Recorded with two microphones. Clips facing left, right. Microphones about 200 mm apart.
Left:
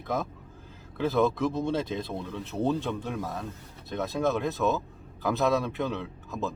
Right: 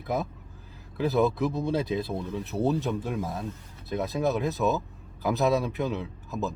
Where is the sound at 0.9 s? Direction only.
5° right (ahead or behind).